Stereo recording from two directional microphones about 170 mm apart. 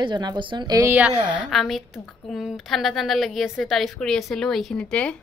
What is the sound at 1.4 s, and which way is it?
A woman's voice, centre (ahead or behind).